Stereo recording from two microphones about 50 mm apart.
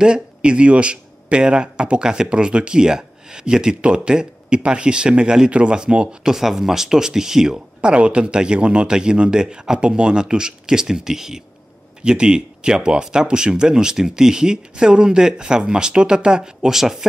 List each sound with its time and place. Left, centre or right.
0.0 s speech: centre